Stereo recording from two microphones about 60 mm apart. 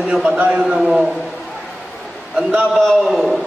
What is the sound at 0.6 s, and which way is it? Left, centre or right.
Speech, centre.